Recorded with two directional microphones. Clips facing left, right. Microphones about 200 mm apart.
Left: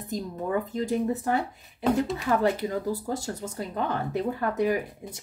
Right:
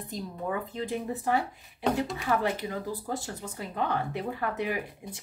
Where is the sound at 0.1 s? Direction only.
40° left (ahead or behind).